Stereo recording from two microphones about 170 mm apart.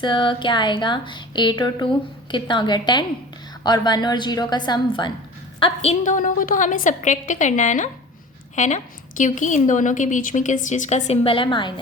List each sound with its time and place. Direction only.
0.0 s a woman's voice: 30° left (ahead or behind)
6.0 s a woman's voice: 50° left (ahead or behind); by 11.7 s 30° left (ahead or behind)